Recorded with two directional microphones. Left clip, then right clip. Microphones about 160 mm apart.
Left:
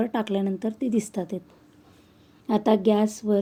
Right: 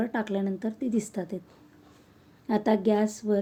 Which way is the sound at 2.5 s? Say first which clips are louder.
Left 3 dB; 30° left (ahead or behind).